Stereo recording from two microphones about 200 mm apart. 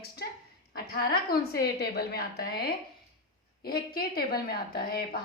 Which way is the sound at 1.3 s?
50° left (ahead or behind).